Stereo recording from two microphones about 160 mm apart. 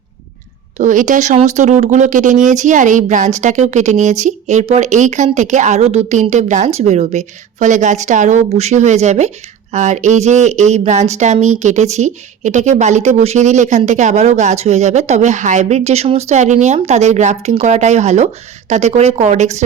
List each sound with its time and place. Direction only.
0.8 s speech: 50° right (ahead or behind)